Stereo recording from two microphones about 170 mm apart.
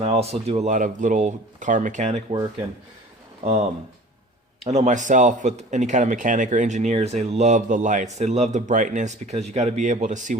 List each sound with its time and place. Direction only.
0.0 s speech: 35° right (ahead or behind)
4.6 s speech: 40° right (ahead or behind)